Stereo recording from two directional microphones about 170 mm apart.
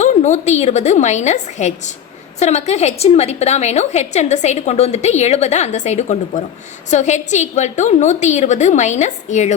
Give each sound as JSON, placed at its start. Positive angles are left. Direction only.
{"t": 0.0, "sound": "a woman's voice", "side_deg": 45}